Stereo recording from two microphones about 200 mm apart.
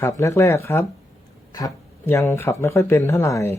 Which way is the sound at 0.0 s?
15° left (ahead or behind).